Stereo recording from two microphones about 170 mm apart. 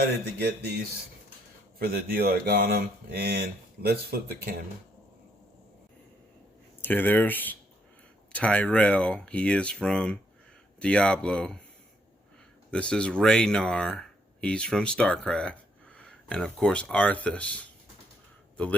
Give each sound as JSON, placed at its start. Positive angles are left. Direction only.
{"t": 0.3, "sound": "speech", "side_deg": -75}
{"t": 1.8, "sound": "speech", "side_deg": -65}
{"t": 6.8, "sound": "speech", "side_deg": 10}
{"t": 12.7, "sound": "speech", "side_deg": 5}